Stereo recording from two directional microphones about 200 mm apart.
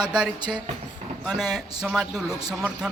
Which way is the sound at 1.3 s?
Centre (ahead or behind).